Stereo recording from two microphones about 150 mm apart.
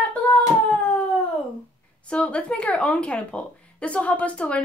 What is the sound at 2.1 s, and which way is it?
Speech, 10° left (ahead or behind).